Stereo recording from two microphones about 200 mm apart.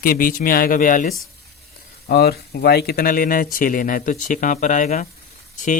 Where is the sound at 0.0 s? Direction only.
45° left (ahead or behind).